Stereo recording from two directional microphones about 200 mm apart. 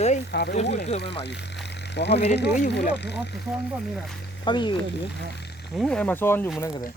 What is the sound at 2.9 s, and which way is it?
Speech, 60° left (ahead or behind).